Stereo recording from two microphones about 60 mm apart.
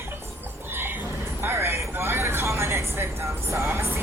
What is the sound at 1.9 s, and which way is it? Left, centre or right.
Music, right.